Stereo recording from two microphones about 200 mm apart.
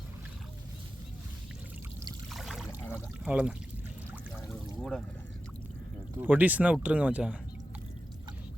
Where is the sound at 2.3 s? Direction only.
Centre (ahead or behind).